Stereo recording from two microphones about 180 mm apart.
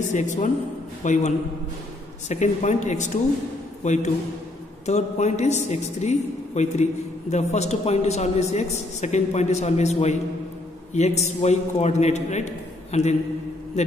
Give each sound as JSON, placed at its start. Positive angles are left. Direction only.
{"t": 0.1, "sound": "a man's voice", "side_deg": 45}